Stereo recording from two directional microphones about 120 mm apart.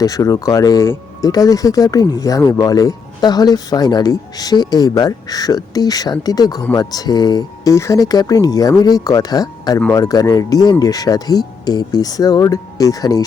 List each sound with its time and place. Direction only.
0.0 s speech: 30° left (ahead or behind)